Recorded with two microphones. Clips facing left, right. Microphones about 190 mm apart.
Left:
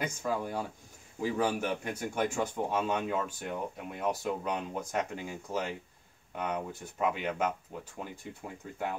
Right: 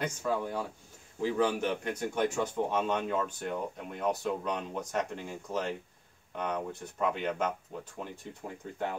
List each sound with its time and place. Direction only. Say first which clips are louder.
0.0 s speech: right 1 dB; 10° left (ahead or behind)